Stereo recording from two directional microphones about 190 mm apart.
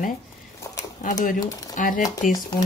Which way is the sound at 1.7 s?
45° left (ahead or behind).